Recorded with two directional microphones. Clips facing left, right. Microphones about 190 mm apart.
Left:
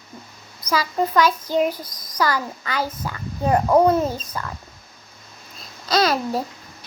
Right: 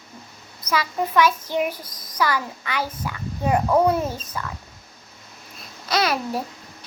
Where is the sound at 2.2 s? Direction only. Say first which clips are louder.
Left 1 dB; 35° left (ahead or behind).